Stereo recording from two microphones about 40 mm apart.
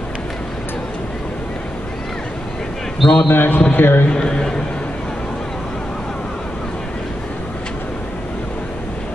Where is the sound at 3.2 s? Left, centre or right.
Left.